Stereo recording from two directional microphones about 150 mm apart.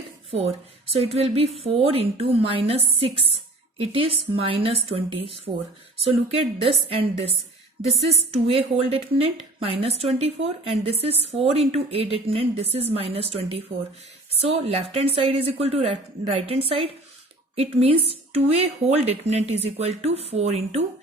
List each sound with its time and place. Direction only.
0.3 s a woman's voice: 45° right (ahead or behind)
8.4 s speech: 40° right (ahead or behind)